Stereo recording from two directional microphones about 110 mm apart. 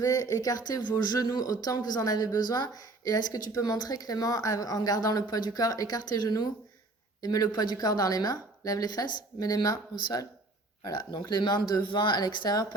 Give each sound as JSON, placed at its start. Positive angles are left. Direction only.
{"t": 0.0, "sound": "speech", "side_deg": 30}